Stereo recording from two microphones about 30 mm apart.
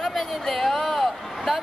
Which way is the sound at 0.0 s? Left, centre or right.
Centre.